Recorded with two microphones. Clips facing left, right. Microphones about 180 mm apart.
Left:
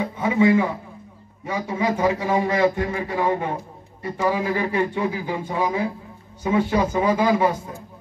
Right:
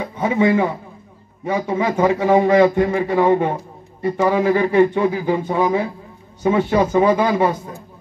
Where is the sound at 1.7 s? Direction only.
25° right (ahead or behind).